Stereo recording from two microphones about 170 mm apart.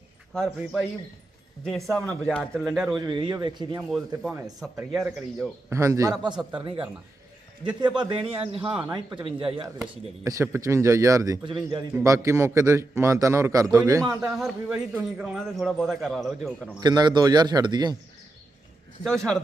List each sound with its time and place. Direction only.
0.3 s speech: 5° left (ahead or behind)
3.0 s a man's voice: 25° right (ahead or behind)
3.8 s speech: centre (ahead or behind)
5.7 s a man's voice: 20° right (ahead or behind)
7.9 s a man's voice: 30° right (ahead or behind)
10.2 s a man's voice: 15° right (ahead or behind)
14.2 s speech: centre (ahead or behind)
16.8 s a man's voice: 25° right (ahead or behind)
19.0 s speech: 5° left (ahead or behind)